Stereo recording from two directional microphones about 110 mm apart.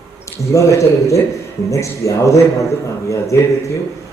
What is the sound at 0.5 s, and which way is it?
A man's voice, 30° left (ahead or behind).